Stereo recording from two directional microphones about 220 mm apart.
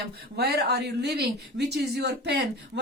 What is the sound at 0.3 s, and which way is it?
Speech, 45° right (ahead or behind).